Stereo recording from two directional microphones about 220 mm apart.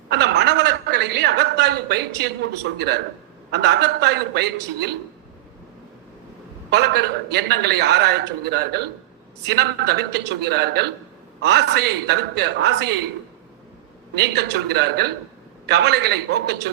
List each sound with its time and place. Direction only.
0.1 s a sound: 50° right (ahead or behind)
3.5 s a man's voice: 50° right (ahead or behind)
6.7 s a man's voice: 50° right (ahead or behind)
14.2 s a man's voice: 50° right (ahead or behind)